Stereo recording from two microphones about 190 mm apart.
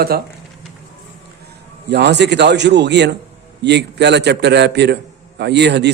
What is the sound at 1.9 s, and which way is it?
A man's voice, 60° right (ahead or behind).